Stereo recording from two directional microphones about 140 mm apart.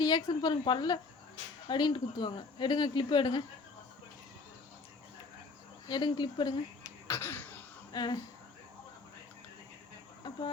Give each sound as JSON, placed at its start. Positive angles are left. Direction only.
{"t": 0.0, "sound": "speech", "side_deg": 30}
{"t": 5.9, "sound": "speech", "side_deg": 30}
{"t": 7.1, "sound": "a sound", "side_deg": 15}
{"t": 7.9, "sound": "speech", "side_deg": 30}